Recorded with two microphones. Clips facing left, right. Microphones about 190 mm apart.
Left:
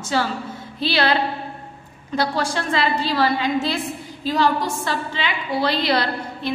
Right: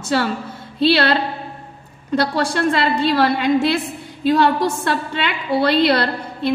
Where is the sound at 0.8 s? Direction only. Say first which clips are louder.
Right 6 dB; 65° right (ahead or behind).